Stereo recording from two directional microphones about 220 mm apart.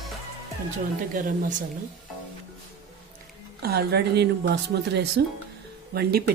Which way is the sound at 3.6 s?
45° right (ahead or behind).